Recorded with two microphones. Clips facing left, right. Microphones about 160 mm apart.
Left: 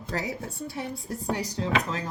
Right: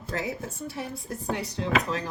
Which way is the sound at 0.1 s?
35° left (ahead or behind).